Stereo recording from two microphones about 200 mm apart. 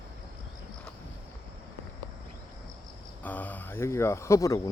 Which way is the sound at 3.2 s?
10° left (ahead or behind).